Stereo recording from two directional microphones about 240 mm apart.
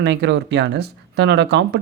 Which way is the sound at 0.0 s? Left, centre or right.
Right.